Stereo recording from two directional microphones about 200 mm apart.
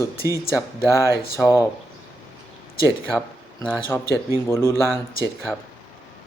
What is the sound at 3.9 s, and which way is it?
Speech, centre (ahead or behind).